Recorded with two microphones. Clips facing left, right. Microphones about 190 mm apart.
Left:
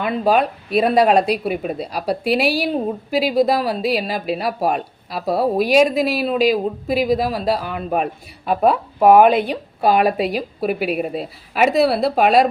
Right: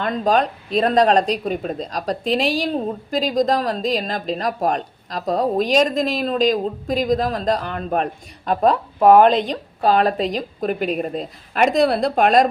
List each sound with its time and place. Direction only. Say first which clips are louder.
0.0 s speech: left 1 dB; 10° left (ahead or behind)